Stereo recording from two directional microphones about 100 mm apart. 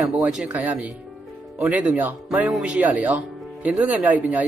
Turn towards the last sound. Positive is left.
turn(degrees=-15)  # may be behind; listen again after turning